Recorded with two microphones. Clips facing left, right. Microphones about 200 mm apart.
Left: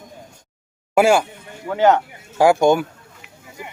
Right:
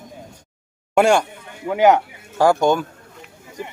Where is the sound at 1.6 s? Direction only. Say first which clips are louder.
Right 1 dB; 10° right (ahead or behind).